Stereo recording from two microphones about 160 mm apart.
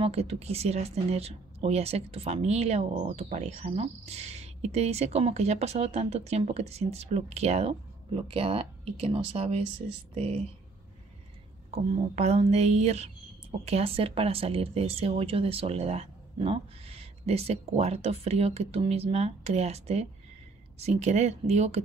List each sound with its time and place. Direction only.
0.0 s speech: 40° right (ahead or behind)
11.9 s music: 40° right (ahead or behind)
13.7 s speech: 40° right (ahead or behind)
20.8 s music: 45° right (ahead or behind)